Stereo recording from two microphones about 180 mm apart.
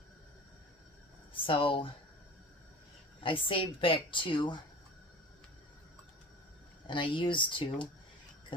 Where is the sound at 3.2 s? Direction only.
30° left (ahead or behind).